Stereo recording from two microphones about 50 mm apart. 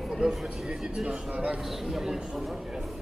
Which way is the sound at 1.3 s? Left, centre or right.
Right.